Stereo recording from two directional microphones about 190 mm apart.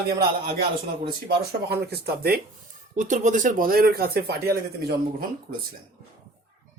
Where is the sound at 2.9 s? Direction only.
40° right (ahead or behind).